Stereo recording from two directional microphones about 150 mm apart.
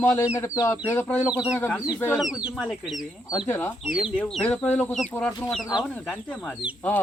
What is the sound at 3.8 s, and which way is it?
Speech, 5° right (ahead or behind).